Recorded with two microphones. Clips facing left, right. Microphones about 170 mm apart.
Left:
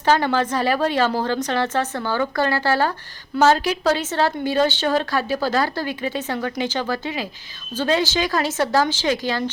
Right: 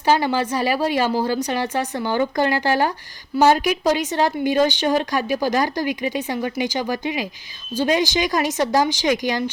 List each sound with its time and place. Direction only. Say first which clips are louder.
0.0 s a woman's voice: even; 10° right (ahead or behind)